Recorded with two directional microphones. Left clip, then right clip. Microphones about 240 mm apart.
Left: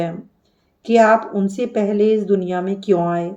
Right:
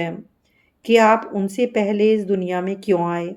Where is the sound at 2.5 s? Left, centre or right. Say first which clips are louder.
Left 2 dB; right.